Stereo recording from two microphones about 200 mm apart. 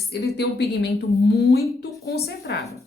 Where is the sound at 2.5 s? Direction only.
60° left (ahead or behind).